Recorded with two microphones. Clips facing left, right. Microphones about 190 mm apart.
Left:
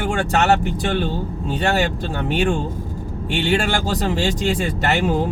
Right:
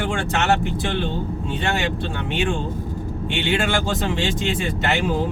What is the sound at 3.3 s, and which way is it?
Speech, 40° left (ahead or behind).